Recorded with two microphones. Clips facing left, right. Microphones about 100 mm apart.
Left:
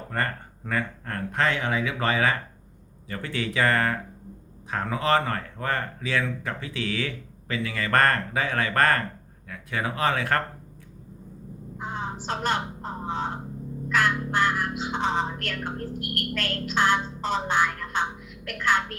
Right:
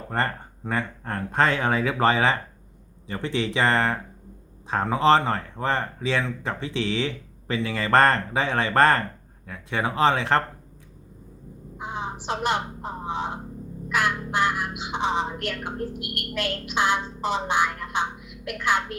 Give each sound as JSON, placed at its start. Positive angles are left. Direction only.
{"t": 0.1, "sound": "speech", "side_deg": -25}
{"t": 11.8, "sound": "a sound", "side_deg": -15}
{"t": 12.2, "sound": "speech", "side_deg": -15}